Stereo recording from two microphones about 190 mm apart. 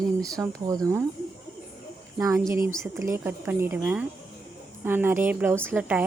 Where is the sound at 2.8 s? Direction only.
15° right (ahead or behind).